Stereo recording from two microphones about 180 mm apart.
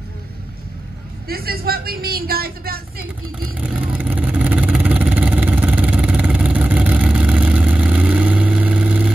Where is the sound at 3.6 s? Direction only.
10° right (ahead or behind).